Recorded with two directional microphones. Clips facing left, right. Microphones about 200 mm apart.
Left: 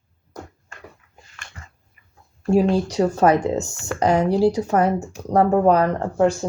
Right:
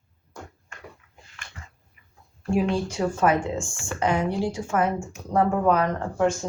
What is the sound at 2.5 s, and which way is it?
Speech, 40° left (ahead or behind).